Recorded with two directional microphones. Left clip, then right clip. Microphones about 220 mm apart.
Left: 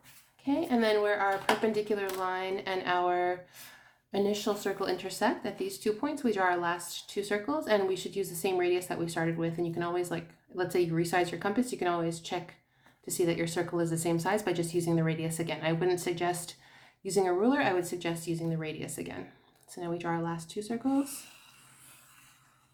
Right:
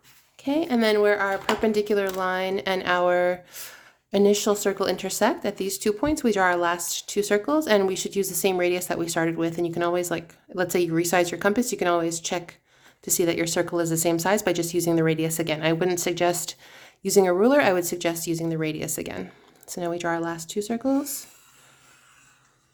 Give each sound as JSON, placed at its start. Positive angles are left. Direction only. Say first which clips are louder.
{"t": 0.4, "sound": "speech", "louder": "right 6 dB", "side_deg": -50}